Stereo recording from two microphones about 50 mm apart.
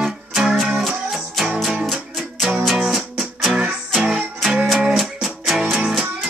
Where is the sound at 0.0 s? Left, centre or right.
Centre.